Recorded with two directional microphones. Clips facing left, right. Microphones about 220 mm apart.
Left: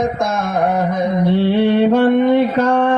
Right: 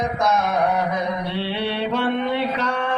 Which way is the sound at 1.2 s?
50° left (ahead or behind).